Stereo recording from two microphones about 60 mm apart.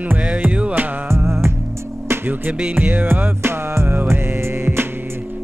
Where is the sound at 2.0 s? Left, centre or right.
Right.